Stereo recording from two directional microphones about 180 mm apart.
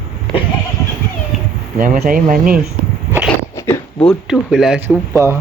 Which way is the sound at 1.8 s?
50° right (ahead or behind).